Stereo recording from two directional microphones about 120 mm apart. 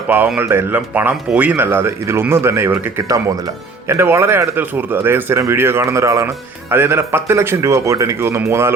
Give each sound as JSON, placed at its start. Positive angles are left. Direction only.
{"t": 0.3, "sound": "speech", "side_deg": -20}
{"t": 3.0, "sound": "speech", "side_deg": -25}